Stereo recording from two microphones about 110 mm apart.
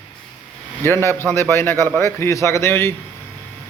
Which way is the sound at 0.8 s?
20° left (ahead or behind).